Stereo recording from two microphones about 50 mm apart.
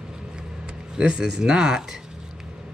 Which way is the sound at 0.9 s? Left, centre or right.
Centre.